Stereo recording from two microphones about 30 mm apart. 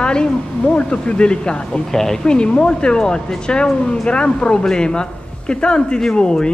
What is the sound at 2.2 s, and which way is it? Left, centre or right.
A man's voice, left.